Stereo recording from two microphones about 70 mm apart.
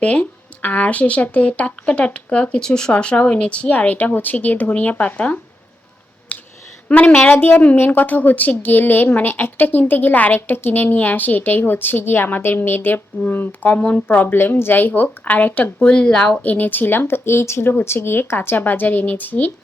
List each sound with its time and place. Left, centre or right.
0.0 s speech: left
6.3 s a sound: left
6.8 s speech: left
15.8 s speech: centre
16.4 s speech: left